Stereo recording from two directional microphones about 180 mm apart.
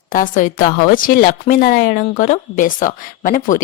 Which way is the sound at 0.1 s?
50° left (ahead or behind).